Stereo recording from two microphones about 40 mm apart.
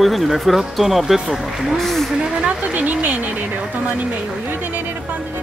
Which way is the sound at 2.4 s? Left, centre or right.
Right.